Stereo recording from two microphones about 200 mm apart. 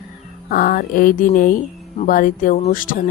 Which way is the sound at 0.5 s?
45° left (ahead or behind).